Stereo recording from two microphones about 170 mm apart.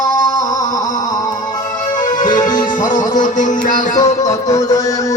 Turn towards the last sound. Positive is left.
turn(degrees=50)  # may be behind; listen again after turning